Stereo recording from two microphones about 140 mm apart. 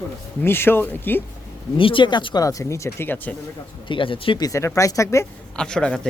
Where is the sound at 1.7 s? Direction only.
40° left (ahead or behind); by 3.3 s 15° left (ahead or behind).